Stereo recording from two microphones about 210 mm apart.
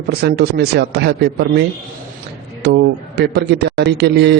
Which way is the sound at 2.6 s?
55° right (ahead or behind).